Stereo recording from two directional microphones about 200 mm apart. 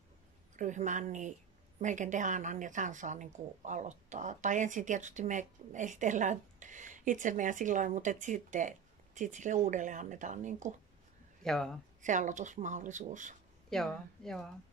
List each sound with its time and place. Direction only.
0.6 s a woman's voice: 40° right (ahead or behind)
11.4 s speech: centre (ahead or behind)
12.0 s a woman's voice: 40° right (ahead or behind)
13.7 s speech: centre (ahead or behind)